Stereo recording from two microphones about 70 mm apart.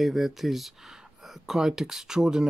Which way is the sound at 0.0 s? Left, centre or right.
Centre.